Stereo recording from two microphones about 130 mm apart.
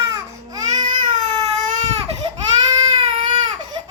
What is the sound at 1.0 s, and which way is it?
Baby cry, 65° right (ahead or behind).